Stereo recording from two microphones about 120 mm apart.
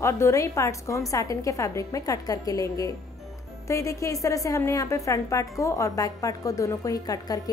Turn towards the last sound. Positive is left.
turn(degrees=30)  # may be behind; listen again after turning